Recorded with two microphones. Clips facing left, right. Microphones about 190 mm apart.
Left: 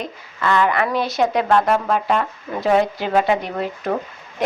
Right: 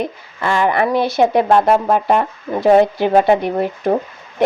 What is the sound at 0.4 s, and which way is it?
Speech, 30° right (ahead or behind).